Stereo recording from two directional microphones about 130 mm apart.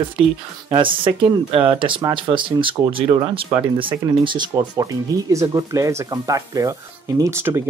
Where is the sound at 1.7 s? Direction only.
40° right (ahead or behind).